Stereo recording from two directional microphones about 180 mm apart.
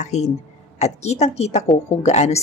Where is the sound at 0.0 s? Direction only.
40° left (ahead or behind).